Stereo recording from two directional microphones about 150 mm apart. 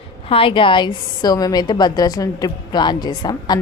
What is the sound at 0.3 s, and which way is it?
A woman's voice, 40° left (ahead or behind).